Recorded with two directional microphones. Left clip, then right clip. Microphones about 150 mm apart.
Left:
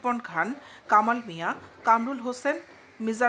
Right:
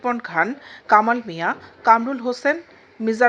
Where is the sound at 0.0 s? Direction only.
20° right (ahead or behind).